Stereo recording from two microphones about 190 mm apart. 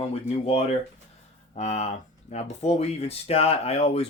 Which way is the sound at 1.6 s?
40° left (ahead or behind).